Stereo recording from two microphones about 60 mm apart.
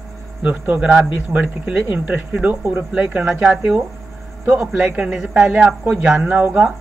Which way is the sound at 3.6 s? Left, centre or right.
Right.